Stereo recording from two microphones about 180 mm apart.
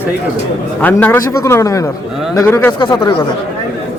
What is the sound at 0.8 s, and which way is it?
A man's voice, 10° left (ahead or behind).